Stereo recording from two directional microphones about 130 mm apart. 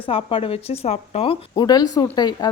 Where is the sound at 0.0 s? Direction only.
45° left (ahead or behind).